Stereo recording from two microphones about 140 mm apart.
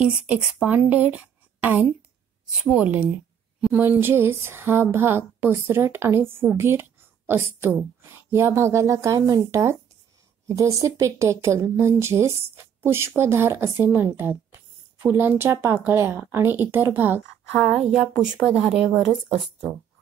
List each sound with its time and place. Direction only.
0.0 s speech: 5° right (ahead or behind)
17.6 s speech: centre (ahead or behind)